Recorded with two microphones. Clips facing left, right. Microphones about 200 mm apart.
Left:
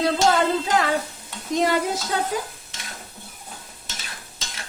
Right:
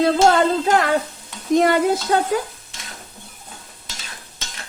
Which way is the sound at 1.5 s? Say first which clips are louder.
Right 6 dB; 55° right (ahead or behind).